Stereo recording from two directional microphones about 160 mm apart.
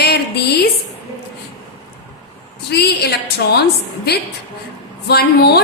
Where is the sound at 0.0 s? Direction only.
85° left.